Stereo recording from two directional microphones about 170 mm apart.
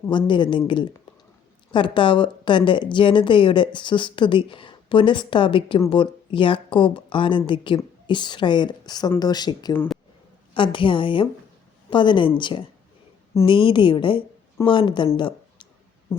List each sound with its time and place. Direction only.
0.1 s a woman's voice: 25° left (ahead or behind)